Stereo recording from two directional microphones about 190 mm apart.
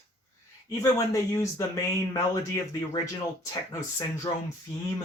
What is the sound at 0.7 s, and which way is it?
Speech, 15° left (ahead or behind).